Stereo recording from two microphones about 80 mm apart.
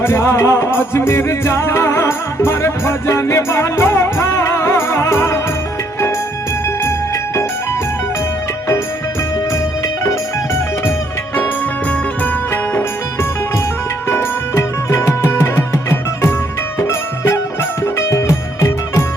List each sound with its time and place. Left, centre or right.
0.0 s music: left
6.7 s music: left
9.5 s music: left
11.3 s music: left
12.5 s music: left